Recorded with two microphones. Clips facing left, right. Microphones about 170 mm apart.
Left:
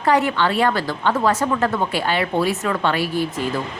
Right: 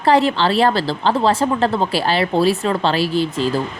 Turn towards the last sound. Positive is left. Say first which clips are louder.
# right 4 dB
turn(degrees=-30)  # may be behind; listen again after turning